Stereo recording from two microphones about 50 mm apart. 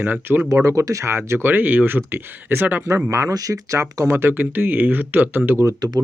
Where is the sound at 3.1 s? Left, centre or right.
Right.